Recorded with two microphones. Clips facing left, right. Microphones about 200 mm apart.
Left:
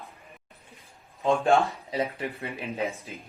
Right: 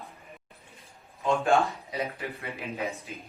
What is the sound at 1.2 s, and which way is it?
Speech, 15° left (ahead or behind).